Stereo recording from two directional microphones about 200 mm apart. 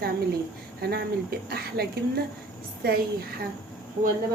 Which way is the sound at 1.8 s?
50° right (ahead or behind).